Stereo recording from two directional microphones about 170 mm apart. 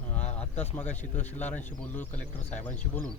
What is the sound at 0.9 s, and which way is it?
Speech, 10° left (ahead or behind).